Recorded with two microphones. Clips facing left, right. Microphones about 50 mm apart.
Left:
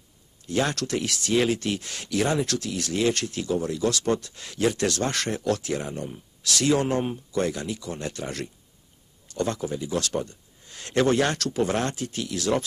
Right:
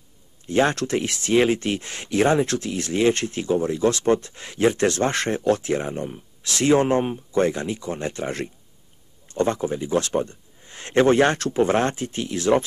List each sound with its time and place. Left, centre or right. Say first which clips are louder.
0.5 s speech: right 5 dB; right